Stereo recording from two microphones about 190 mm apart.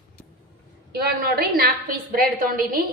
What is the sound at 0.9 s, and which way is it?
A woman's voice, 55° right (ahead or behind).